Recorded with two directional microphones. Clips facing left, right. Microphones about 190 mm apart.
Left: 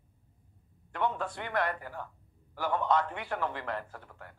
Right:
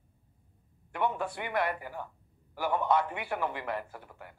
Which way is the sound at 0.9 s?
10° right (ahead or behind).